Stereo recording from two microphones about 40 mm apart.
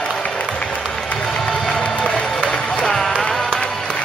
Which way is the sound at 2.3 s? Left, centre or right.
Centre.